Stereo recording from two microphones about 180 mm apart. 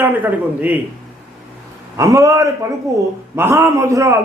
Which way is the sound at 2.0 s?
20° right (ahead or behind).